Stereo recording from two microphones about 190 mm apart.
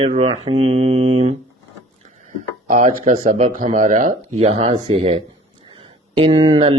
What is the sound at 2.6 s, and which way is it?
Speech, 45° right (ahead or behind).